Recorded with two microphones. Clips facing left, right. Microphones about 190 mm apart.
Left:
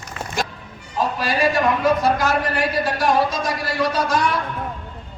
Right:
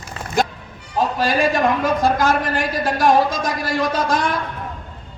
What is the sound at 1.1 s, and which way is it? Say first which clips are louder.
A man's voice: right 1 dB; 45° right (ahead or behind).